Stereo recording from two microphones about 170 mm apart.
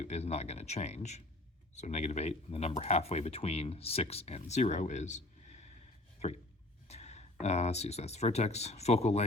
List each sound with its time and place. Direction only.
0.0 s speech: 40° left (ahead or behind)
6.8 s speech: 40° left (ahead or behind)